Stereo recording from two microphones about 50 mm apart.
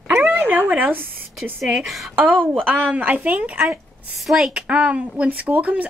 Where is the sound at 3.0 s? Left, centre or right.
Right.